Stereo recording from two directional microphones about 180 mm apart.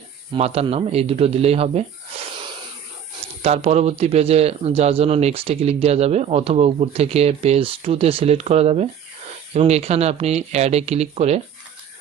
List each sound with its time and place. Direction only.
0.3 s speech: 35° right (ahead or behind)
3.4 s speech: 35° right (ahead or behind)